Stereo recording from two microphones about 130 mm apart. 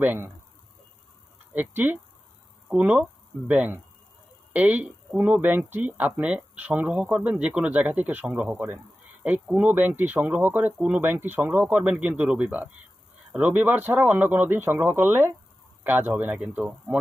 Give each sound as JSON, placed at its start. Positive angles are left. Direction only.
{"t": 0.0, "sound": "speech", "side_deg": -15}
{"t": 1.5, "sound": "speech", "side_deg": -15}